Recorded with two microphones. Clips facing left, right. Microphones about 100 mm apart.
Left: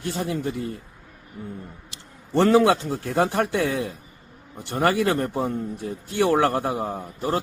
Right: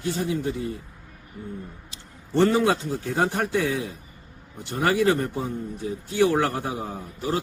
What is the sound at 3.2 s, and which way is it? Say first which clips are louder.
A man's voice: left 2 dB; 55° left (ahead or behind).